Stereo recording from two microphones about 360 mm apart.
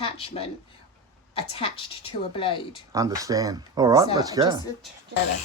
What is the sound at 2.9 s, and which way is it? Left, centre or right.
Speech, centre.